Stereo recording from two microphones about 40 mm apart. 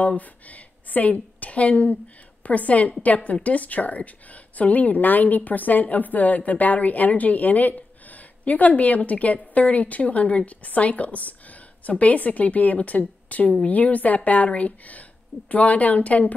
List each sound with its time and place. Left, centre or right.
0.0 s a woman's voice: left